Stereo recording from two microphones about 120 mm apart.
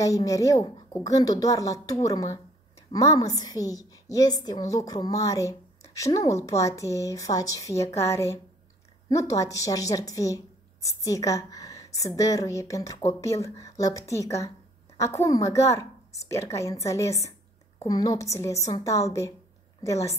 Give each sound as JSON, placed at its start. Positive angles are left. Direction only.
{"t": 0.0, "sound": "speech", "side_deg": 30}